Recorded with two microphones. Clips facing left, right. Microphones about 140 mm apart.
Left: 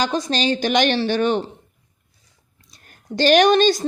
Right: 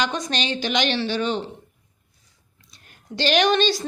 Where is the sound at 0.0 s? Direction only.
35° left (ahead or behind); by 1.5 s 50° left (ahead or behind).